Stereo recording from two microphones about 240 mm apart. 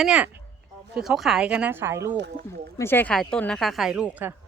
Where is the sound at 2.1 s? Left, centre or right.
Right.